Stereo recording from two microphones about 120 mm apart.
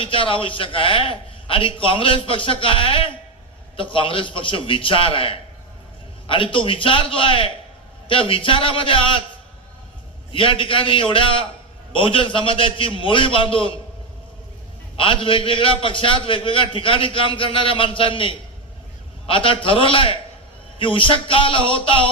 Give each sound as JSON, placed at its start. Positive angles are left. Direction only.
{"t": 0.0, "sound": "a man's voice", "side_deg": 45}
{"t": 10.3, "sound": "a man's voice", "side_deg": 45}
{"t": 14.9, "sound": "a man's voice", "side_deg": 45}